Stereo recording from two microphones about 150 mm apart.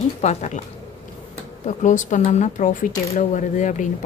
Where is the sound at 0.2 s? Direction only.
50° left (ahead or behind).